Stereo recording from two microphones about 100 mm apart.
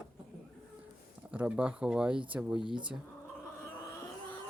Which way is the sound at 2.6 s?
55° right (ahead or behind).